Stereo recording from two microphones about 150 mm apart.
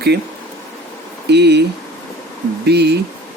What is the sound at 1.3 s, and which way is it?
Speech, 90° right.